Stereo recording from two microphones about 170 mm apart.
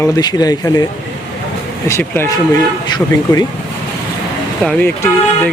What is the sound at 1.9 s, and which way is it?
Speech, 15° left (ahead or behind).